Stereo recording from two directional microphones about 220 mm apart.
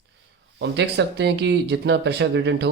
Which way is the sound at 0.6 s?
50° right (ahead or behind).